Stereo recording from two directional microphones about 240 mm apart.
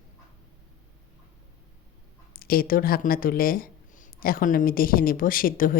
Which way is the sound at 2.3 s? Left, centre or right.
Left.